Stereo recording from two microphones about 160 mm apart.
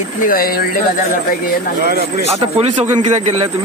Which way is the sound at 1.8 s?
70° right (ahead or behind).